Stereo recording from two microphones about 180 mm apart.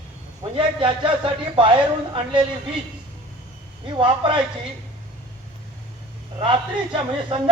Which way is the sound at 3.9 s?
25° right (ahead or behind).